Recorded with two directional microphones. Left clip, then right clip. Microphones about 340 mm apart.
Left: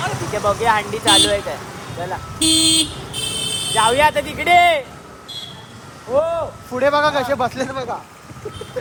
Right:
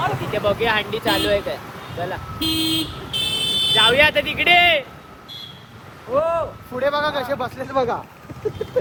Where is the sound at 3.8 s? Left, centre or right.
Centre.